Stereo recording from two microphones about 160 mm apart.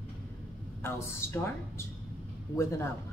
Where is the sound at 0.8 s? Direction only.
15° left (ahead or behind).